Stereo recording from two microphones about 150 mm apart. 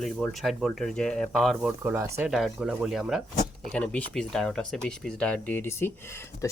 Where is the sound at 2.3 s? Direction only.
Centre (ahead or behind).